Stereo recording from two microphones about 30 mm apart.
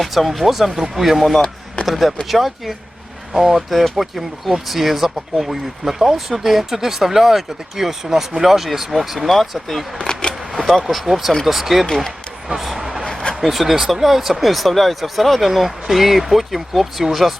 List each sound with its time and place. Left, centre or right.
0.0 s speech: centre
10.1 s a sound: left
10.5 s vehicle: centre
10.8 s speech: centre